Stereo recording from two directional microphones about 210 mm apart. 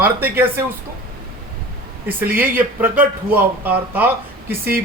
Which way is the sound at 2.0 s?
10° right (ahead or behind).